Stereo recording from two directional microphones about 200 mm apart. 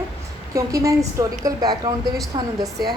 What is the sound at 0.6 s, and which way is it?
A woman's voice, 15° right (ahead or behind).